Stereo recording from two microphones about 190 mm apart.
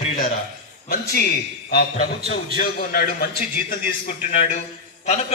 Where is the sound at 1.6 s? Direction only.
45° left (ahead or behind).